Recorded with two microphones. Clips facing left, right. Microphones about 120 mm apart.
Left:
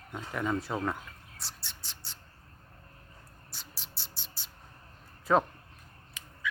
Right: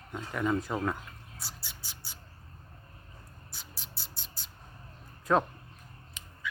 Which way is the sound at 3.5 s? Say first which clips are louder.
Even; centre (ahead or behind).